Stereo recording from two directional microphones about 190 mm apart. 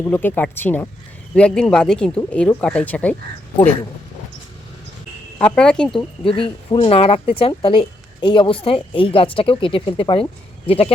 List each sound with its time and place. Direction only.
0.0 s speech: 10° left (ahead or behind)
5.4 s speech: 5° left (ahead or behind)
6.0 s speech: 30° left (ahead or behind)